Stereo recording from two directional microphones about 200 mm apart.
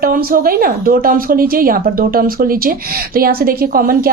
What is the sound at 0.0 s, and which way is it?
Speech, 45° right (ahead or behind).